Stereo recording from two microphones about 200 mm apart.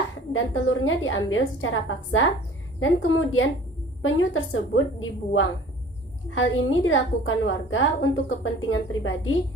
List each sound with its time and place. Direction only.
0.3 s a woman's voice: 80° left